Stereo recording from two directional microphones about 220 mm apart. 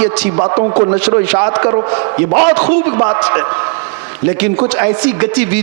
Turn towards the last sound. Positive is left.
turn(degrees=-10)  # may be behind; listen again after turning